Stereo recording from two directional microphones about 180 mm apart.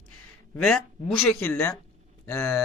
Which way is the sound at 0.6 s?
5° left (ahead or behind).